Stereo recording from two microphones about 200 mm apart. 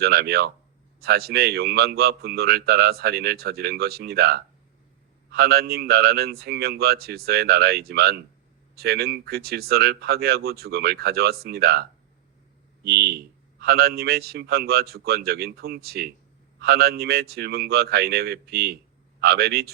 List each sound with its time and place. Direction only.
0.0 s speech: 50° right (ahead or behind)